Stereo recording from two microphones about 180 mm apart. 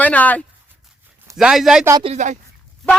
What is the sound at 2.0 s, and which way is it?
Speech, 40° right (ahead or behind).